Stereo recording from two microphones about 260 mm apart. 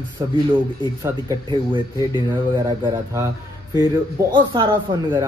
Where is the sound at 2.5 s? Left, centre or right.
Centre.